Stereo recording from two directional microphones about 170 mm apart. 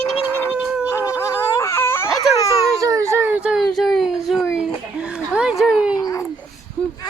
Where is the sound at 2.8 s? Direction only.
20° right (ahead or behind); by 6.0 s 5° right (ahead or behind).